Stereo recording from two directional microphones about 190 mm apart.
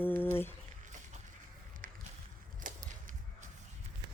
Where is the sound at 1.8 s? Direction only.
45° right (ahead or behind).